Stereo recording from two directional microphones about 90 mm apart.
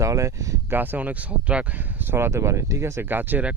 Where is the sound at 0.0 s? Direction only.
35° right (ahead or behind).